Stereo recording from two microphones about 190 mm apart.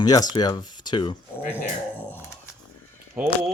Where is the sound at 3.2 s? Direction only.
10° right (ahead or behind).